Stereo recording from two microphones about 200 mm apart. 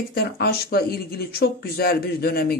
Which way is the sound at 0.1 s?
50° left (ahead or behind).